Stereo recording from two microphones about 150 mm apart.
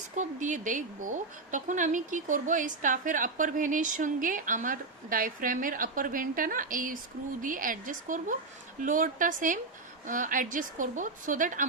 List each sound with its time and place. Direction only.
0.2 s speech: 55° right (ahead or behind)